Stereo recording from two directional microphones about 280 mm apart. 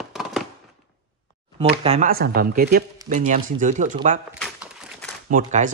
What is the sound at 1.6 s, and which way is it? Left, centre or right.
Speech, right.